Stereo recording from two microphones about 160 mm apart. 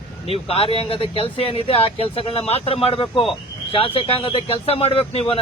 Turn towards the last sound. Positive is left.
turn(degrees=35)  # may be behind; listen again after turning